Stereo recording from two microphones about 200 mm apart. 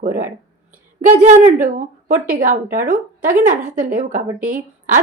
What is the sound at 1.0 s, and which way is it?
A woman's voice, 35° right (ahead or behind).